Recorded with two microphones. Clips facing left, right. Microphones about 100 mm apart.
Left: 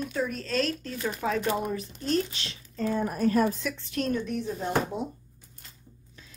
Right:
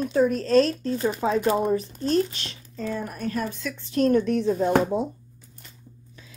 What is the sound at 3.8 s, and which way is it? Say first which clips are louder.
Speech: right 13 dB; 30° right (ahead or behind).